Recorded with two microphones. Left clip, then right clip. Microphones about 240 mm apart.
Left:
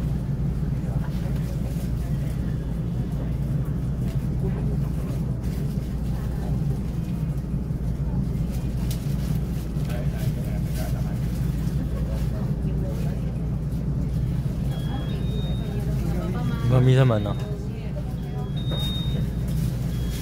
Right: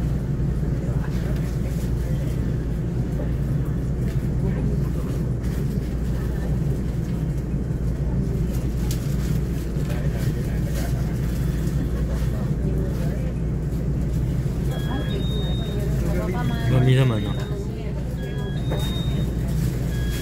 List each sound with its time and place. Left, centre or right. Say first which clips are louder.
16.7 s music: left 2 dB; left